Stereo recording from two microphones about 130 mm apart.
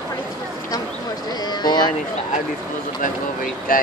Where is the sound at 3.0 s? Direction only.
90° left.